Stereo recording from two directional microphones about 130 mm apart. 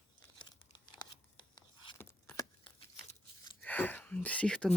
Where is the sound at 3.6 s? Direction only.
15° left (ahead or behind).